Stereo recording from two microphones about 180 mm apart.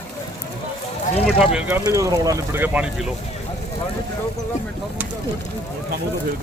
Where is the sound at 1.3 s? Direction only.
Centre (ahead or behind).